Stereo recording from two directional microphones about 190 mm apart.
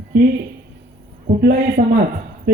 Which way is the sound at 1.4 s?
50° right (ahead or behind).